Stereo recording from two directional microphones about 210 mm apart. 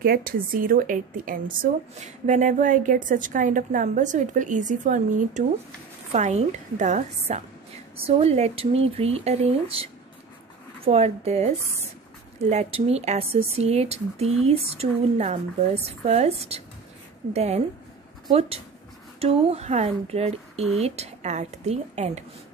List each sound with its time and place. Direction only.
0.0 s a woman's voice: 45° right (ahead or behind)
10.9 s a woman's voice: 30° right (ahead or behind)
19.1 s a woman's voice: 30° right (ahead or behind)